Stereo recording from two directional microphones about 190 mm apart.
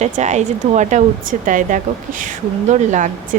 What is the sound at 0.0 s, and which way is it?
Speech, 35° right (ahead or behind).